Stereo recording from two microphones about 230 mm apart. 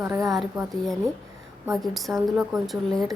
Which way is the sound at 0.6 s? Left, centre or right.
Centre.